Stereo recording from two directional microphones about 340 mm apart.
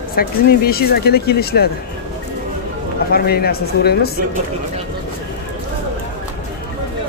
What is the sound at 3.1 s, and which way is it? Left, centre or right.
Speech, left.